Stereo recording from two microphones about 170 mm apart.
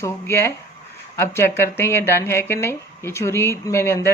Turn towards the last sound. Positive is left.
turn(degrees=15)  # may be behind; listen again after turning